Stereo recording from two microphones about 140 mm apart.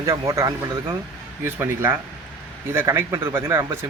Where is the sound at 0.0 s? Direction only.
20° right (ahead or behind).